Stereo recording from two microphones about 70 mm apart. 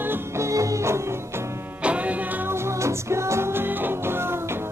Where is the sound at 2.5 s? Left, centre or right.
Right.